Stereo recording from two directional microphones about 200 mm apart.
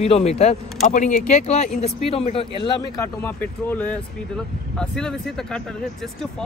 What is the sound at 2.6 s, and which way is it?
Speech, 15° left (ahead or behind).